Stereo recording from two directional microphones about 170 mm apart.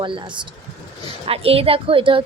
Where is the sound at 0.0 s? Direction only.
30° right (ahead or behind).